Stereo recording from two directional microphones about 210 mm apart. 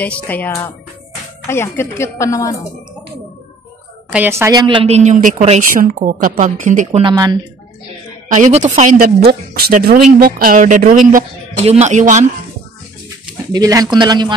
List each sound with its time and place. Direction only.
0.0 s speech: 5° left (ahead or behind)
4.1 s a woman's voice: 10° right (ahead or behind); by 7.0 s 35° right (ahead or behind)
7.0 s speech: 20° right (ahead or behind)
8.3 s a woman's voice: 35° right (ahead or behind)
13.5 s speech: 15° right (ahead or behind)